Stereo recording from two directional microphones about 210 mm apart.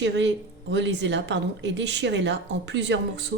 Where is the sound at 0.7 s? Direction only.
55° right (ahead or behind).